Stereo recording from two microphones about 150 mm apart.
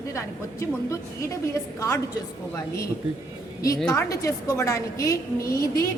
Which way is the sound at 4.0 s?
20° left (ahead or behind).